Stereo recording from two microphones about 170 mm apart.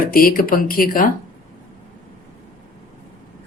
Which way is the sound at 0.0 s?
60° left (ahead or behind).